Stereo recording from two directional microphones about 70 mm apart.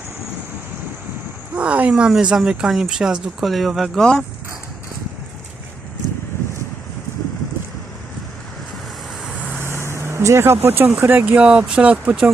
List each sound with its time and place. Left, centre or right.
1.5 s speech: centre
1.9 s speech: centre
3.9 s speech: centre
9.6 s vehicle: right
10.9 s speech: right
11.3 s speech: centre